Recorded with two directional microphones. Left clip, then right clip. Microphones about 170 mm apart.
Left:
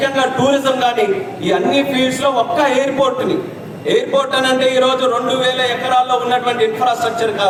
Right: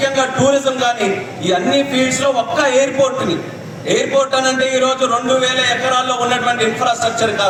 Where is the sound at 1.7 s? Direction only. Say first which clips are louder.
Even; 40° right (ahead or behind).